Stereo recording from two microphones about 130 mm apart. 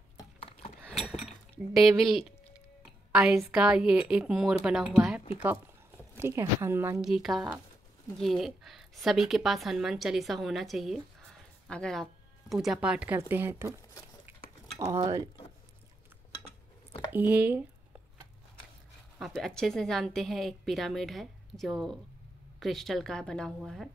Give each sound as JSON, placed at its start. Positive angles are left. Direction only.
{"t": 0.4, "sound": "a sound", "side_deg": 45}
{"t": 0.7, "sound": "a sound", "side_deg": 10}
{"t": 1.2, "sound": "a woman's voice", "side_deg": -5}
{"t": 6.1, "sound": "a woman's voice", "side_deg": -20}
{"t": 7.0, "sound": "a woman's voice", "side_deg": -5}
{"t": 17.1, "sound": "speech", "side_deg": -15}
{"t": 19.1, "sound": "a woman's voice", "side_deg": 0}